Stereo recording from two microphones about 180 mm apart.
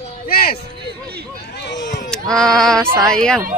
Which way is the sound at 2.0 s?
5° left (ahead or behind).